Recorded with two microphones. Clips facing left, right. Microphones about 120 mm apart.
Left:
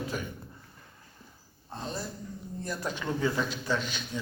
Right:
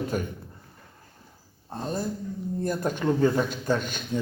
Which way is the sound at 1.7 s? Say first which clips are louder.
Right 7 dB; 45° right (ahead or behind).